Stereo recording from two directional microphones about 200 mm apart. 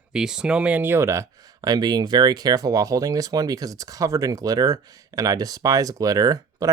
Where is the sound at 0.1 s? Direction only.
5° right (ahead or behind).